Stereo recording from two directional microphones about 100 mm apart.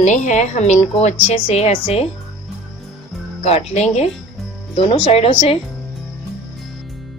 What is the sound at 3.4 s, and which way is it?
Speech, 90° left.